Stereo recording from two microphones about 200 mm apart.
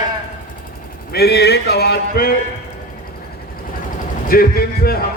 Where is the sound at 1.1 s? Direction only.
55° left (ahead or behind).